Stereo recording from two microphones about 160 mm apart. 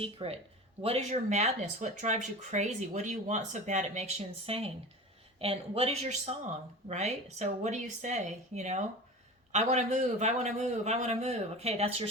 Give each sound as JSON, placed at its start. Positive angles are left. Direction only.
{"t": 0.0, "sound": "speech", "side_deg": -40}
{"t": 4.4, "sound": "speech", "side_deg": -35}